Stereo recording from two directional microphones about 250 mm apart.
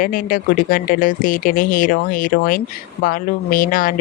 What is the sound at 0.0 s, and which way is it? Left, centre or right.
Speech, left.